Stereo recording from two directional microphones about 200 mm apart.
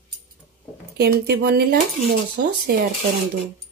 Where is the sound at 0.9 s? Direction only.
50° right (ahead or behind).